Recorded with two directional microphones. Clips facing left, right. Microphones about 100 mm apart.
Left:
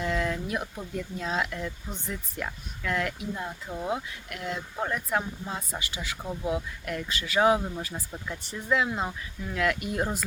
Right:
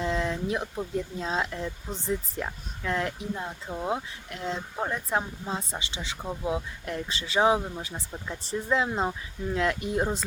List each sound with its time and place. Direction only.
0.0 s speech: 25° right (ahead or behind)
3.3 s speech: 15° right (ahead or behind)